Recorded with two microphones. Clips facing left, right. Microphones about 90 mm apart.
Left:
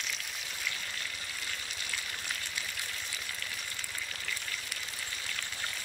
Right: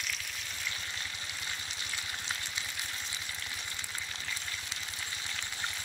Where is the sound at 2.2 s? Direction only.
20° right (ahead or behind).